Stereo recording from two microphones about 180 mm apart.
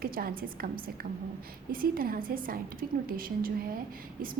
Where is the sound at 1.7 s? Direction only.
55° right (ahead or behind).